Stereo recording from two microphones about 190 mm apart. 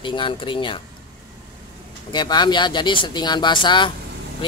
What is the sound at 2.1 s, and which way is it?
Speech, 25° left (ahead or behind).